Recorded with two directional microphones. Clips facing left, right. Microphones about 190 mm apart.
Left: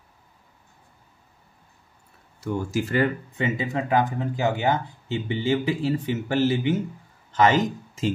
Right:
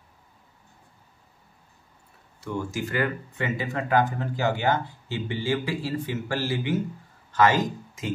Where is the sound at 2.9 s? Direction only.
20° left (ahead or behind).